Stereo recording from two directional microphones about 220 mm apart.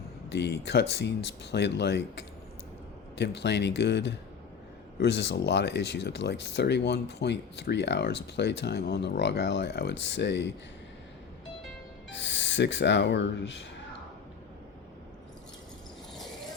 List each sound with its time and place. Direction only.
0.3 s speech: 50° left (ahead or behind)
12.1 s speech: 55° left (ahead or behind)